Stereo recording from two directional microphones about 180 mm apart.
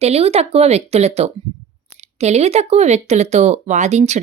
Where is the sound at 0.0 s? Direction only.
35° right (ahead or behind).